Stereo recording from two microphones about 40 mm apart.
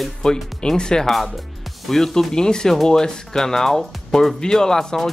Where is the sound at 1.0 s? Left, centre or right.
Centre.